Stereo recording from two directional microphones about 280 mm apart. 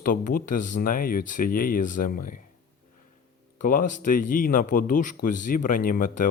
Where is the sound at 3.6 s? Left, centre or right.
Left.